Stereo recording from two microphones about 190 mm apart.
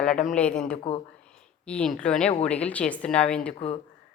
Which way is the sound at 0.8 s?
30° left (ahead or behind).